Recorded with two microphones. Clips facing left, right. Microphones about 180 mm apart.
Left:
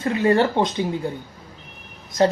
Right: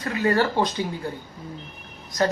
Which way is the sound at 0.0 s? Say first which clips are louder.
Left 4 dB; 25° left (ahead or behind).